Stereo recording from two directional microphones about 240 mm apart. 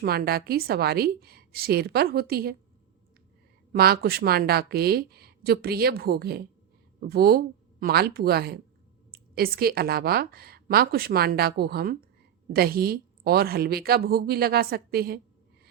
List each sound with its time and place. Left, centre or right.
0.0 s a woman's voice: right
3.7 s a woman's voice: right